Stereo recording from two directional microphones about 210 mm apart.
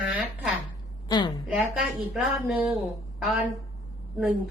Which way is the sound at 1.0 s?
20° left (ahead or behind).